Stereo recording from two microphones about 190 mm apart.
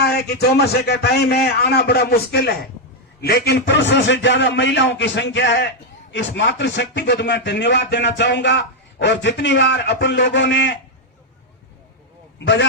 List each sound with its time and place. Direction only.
0.0 s a man's voice: 60° left (ahead or behind)